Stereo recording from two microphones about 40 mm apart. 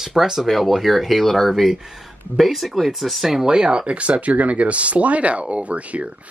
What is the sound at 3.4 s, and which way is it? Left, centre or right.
Speech, right.